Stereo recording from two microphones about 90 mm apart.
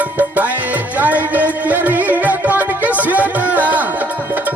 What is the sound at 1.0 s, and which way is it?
Music, 20° right (ahead or behind).